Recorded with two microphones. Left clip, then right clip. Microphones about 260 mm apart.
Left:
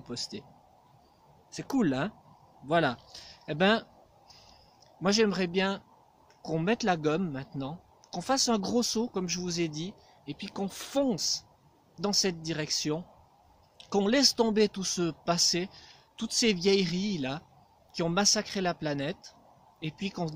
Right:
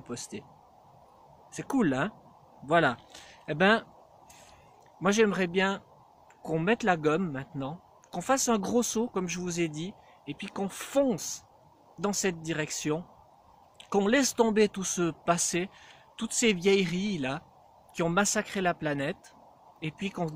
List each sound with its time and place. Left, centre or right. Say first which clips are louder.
0.1 s speech: left 2 dB; centre
1.5 s speech: right 1 dB; centre
5.0 s speech: right 1 dB; centre